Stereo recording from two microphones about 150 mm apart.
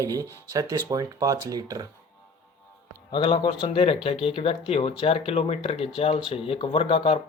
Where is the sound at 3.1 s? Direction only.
35° left (ahead or behind).